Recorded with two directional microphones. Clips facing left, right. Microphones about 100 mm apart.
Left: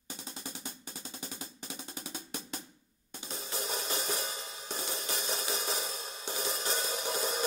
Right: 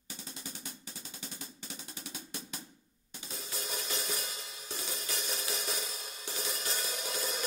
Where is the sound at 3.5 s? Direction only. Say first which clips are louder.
Left 4 dB; 35° left (ahead or behind).